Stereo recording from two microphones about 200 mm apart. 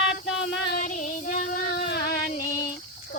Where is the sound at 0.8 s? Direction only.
40° left (ahead or behind).